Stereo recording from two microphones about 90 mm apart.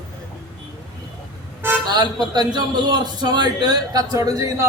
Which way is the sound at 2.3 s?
50° right (ahead or behind).